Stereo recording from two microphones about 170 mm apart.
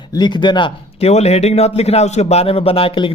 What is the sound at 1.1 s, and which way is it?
Speech, 40° left (ahead or behind).